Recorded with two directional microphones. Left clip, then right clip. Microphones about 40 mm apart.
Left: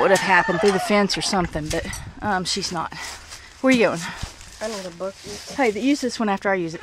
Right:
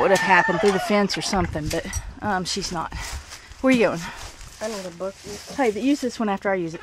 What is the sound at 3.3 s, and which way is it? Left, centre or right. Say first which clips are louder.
Zipper: left 1 dB; left.